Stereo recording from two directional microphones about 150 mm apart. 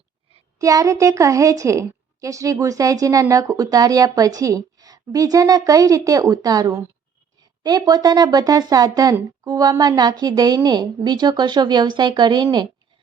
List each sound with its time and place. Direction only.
0.6 s a woman's voice: 20° right (ahead or behind)